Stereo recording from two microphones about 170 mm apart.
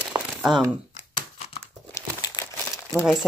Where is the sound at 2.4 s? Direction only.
25° left (ahead or behind).